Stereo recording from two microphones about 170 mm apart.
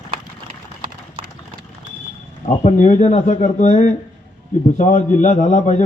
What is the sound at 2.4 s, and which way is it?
A man's voice, 45° left (ahead or behind).